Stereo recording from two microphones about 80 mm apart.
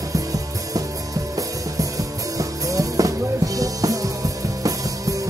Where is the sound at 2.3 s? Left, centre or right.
Right.